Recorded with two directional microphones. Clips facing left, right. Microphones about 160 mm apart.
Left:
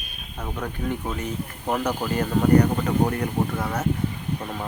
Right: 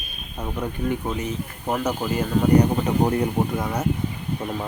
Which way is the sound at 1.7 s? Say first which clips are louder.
Right 1 dB; 5° right (ahead or behind).